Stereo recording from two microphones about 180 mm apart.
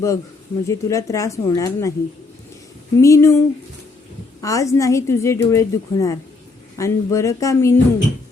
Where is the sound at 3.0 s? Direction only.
15° left (ahead or behind).